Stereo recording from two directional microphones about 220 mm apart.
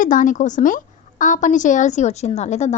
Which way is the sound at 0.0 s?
35° left (ahead or behind).